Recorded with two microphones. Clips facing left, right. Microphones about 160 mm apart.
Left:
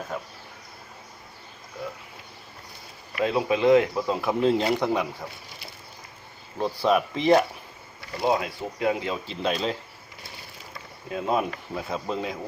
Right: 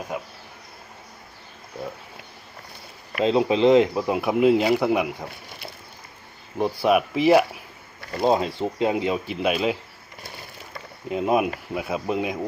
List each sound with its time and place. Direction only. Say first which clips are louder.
0.1 s speech: right 3 dB; 10° right (ahead or behind)
3.2 s speech: right 3 dB; 25° right (ahead or behind); by 5.0 s 10° right (ahead or behind)
6.6 s speech: right 3 dB; 10° right (ahead or behind)
8.3 s speech: right 4 dB; 25° right (ahead or behind); by 9.7 s 10° right (ahead or behind)
11.1 s speech: right 4 dB; 20° right (ahead or behind)